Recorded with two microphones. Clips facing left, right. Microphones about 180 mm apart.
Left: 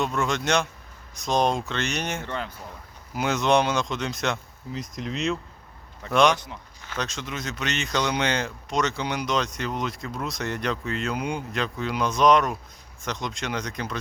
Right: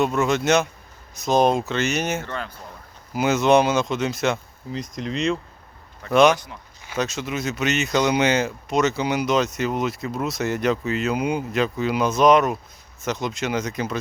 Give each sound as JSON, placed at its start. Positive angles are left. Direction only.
{"t": 0.0, "sound": "speech", "side_deg": -5}
{"t": 2.2, "sound": "speech", "side_deg": 15}
{"t": 3.1, "sound": "speech", "side_deg": -5}
{"t": 6.3, "sound": "speech", "side_deg": 25}
{"t": 6.8, "sound": "speech", "side_deg": -10}